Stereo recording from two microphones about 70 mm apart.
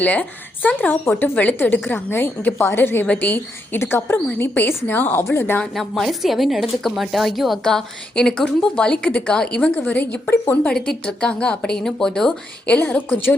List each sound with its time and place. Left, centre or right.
0.0 s a woman's voice: left
5.7 s a woman's voice: centre; by 10.2 s left
10.2 s a woman's voice: left
10.5 s a woman's voice: centre
12.7 s a woman's voice: centre